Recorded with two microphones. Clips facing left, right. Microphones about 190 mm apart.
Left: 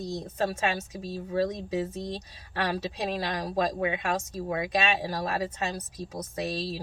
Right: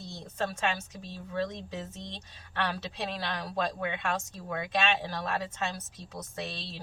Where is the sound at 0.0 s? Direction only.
40° left (ahead or behind).